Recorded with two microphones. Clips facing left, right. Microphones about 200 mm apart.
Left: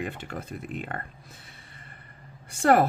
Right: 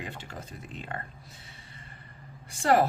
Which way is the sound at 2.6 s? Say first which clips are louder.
Left 3 dB; 55° left (ahead or behind).